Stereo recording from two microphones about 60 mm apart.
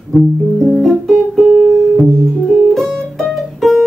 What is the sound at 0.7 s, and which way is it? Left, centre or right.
Music, centre.